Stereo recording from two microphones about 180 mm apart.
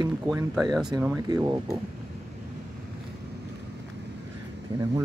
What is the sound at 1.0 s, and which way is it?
Speech, 15° right (ahead or behind).